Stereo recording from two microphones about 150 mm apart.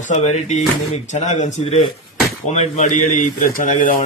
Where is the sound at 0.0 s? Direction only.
50° left (ahead or behind).